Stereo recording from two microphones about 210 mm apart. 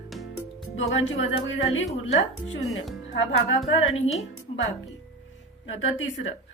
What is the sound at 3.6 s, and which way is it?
Speech, 65° left (ahead or behind).